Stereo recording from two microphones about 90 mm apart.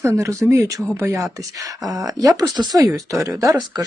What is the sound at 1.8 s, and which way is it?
Speech, 40° right (ahead or behind).